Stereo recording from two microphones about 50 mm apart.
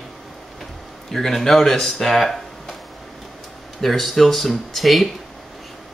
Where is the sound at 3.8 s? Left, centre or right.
Centre.